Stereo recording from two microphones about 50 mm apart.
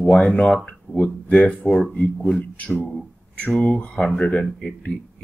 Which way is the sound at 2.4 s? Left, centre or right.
Left.